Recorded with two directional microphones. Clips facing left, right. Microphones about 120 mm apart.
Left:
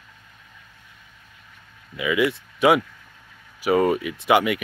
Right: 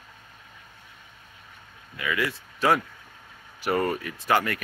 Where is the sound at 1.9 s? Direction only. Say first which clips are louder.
Left 7 dB; 15° left (ahead or behind).